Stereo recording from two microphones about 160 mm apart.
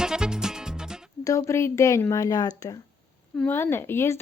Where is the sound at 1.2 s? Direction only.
20° left (ahead or behind).